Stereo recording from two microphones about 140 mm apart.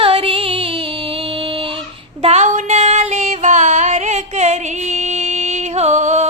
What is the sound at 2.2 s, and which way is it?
Female singing, 55° right (ahead or behind).